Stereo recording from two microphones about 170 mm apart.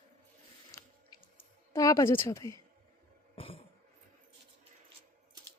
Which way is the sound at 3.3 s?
35° left (ahead or behind).